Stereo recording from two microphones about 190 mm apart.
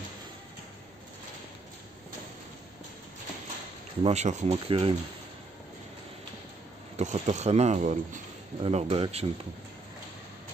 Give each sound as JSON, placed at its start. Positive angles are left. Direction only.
{"t": 4.0, "sound": "speech", "side_deg": -35}
{"t": 7.0, "sound": "speech", "side_deg": -40}
{"t": 8.6, "sound": "speech", "side_deg": -30}